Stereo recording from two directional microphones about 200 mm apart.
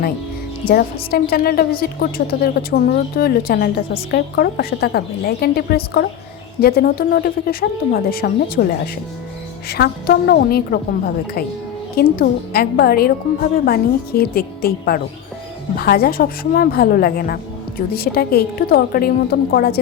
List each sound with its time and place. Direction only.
1.1 s a woman's voice: 50° left (ahead or behind)
9.6 s a woman's voice: 55° left (ahead or behind)